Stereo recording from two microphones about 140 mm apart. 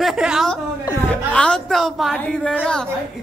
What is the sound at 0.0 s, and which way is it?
Chuckle, 5° right (ahead or behind).